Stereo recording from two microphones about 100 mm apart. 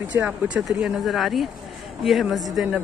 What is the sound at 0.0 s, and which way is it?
Speech, 20° right (ahead or behind).